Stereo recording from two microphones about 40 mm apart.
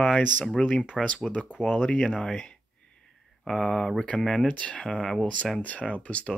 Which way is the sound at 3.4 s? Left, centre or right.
Centre.